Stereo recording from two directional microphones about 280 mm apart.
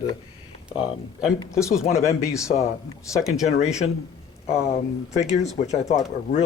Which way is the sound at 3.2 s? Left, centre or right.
Centre.